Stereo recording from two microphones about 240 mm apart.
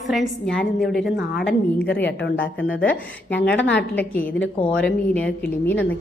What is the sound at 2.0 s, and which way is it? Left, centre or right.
Speech, left.